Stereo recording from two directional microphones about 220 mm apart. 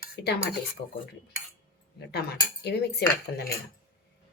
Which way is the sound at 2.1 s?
50° left (ahead or behind).